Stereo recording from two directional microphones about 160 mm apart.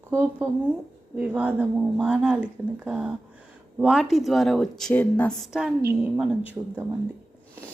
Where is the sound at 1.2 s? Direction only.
10° right (ahead or behind).